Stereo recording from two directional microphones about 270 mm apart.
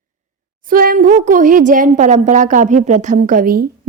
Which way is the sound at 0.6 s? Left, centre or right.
Right.